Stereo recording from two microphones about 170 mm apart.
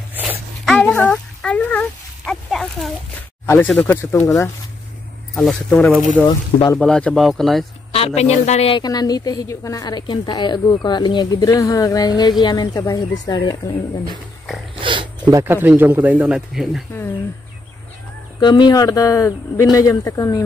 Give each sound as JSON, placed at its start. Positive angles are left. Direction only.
{"t": 0.1, "sound": "a sound", "side_deg": -10}
{"t": 0.7, "sound": "speech", "side_deg": 10}
{"t": 5.3, "sound": "speech", "side_deg": 0}
{"t": 6.2, "sound": "a woman's voice", "side_deg": 25}
{"t": 6.8, "sound": "speech", "side_deg": 5}
{"t": 7.9, "sound": "speech", "side_deg": 40}
{"t": 8.8, "sound": "a woman's voice", "side_deg": 20}
{"t": 14.8, "sound": "a sound", "side_deg": -30}
{"t": 15.3, "sound": "speech", "side_deg": -15}
{"t": 18.4, "sound": "a woman's voice", "side_deg": 25}